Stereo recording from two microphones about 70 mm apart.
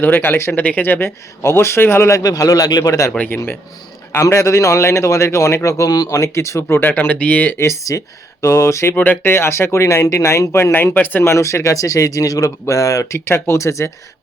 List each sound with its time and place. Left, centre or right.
0.0 s speech: left
2.1 s a man's voice: left
3.2 s speech: left
4.1 s speech: left
7.6 s speech: left
9.0 s speech: left
11.2 s speech: left